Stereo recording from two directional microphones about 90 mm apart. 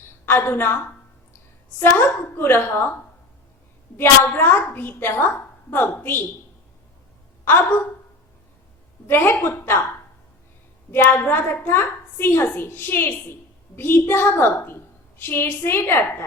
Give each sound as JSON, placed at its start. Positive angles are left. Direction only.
{"t": 0.3, "sound": "a woman's voice", "side_deg": 25}
{"t": 1.8, "sound": "a woman's voice", "side_deg": 25}
{"t": 3.9, "sound": "a woman's voice", "side_deg": 25}
{"t": 7.4, "sound": "a woman's voice", "side_deg": 25}
{"t": 9.0, "sound": "a woman's voice", "side_deg": 25}
{"t": 10.9, "sound": "a woman's voice", "side_deg": 25}